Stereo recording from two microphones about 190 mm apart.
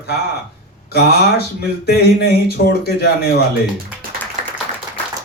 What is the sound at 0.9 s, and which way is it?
Speech, 55° left (ahead or behind).